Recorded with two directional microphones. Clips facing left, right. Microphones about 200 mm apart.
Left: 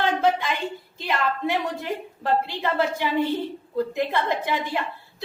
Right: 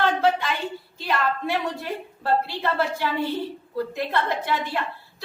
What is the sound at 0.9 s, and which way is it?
A woman's voice, 15° left (ahead or behind).